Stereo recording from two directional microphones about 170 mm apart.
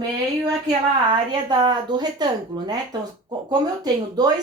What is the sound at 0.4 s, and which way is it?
A woman's voice, 25° right (ahead or behind).